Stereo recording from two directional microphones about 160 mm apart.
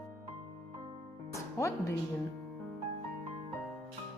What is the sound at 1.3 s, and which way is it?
Speech, 20° left (ahead or behind).